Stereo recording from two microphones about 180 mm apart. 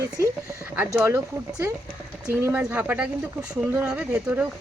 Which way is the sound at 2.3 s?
10° right (ahead or behind).